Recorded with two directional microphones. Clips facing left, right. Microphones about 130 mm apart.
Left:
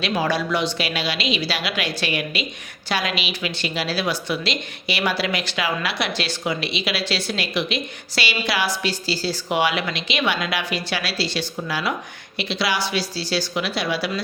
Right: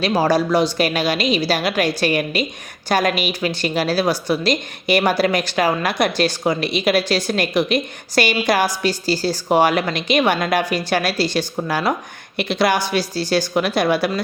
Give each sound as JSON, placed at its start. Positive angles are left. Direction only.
{"t": 0.0, "sound": "a woman's voice", "side_deg": -40}